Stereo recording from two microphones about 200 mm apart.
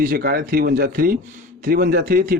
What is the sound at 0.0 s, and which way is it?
Speech, 45° right (ahead or behind).